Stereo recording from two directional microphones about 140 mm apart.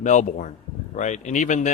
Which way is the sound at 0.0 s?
60° left (ahead or behind).